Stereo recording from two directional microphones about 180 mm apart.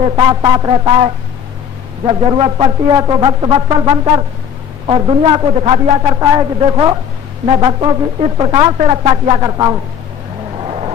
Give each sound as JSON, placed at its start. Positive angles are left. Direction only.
{"t": 0.2, "sound": "a man's voice", "side_deg": -25}